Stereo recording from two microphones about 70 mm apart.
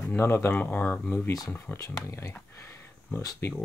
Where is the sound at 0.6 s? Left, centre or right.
Left.